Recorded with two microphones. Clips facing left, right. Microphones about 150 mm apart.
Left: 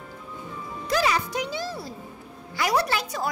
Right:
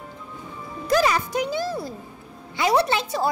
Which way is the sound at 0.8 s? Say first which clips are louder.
Right 4 dB; 45° right (ahead or behind).